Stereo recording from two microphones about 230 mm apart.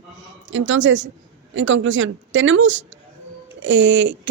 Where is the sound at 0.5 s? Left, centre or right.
Right.